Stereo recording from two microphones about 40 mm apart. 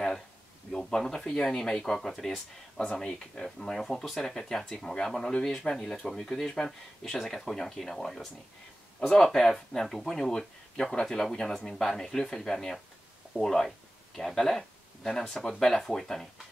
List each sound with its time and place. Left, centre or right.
0.7 s speech: centre
4.6 s speech: centre
7.2 s speech: centre
7.4 s speech: centre
15.2 s speech: centre